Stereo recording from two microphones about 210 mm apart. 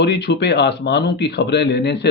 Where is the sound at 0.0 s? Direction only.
55° left (ahead or behind).